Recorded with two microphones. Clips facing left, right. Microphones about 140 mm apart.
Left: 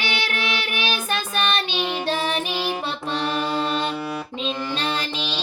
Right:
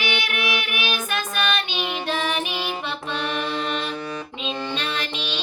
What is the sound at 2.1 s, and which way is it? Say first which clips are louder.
Music: even; 35° left (ahead or behind).